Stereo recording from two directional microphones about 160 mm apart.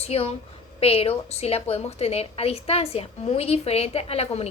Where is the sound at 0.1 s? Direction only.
40° left (ahead or behind).